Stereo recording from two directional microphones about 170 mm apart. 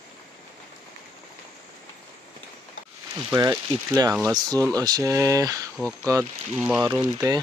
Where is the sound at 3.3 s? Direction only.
20° right (ahead or behind).